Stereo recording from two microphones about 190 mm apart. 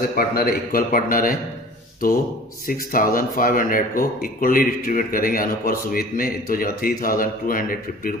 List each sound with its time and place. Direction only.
0.2 s speech: 50° left (ahead or behind)
2.9 s speech: 45° left (ahead or behind)